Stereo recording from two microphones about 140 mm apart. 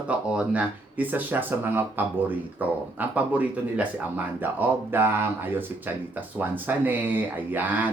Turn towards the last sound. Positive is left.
turn(degrees=-10)  # may be behind; listen again after turning